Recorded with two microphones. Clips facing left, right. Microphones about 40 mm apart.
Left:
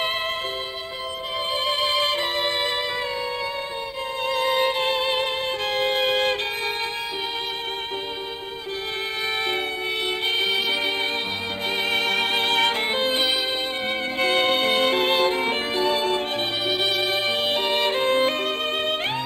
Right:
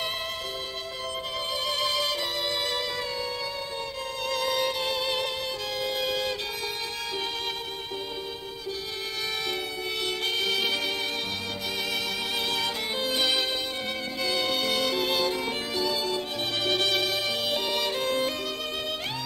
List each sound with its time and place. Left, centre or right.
1.6 s music: left
4.3 s music: left
10.2 s music: left
11.9 s music: left
16.6 s music: centre
17.0 s music: left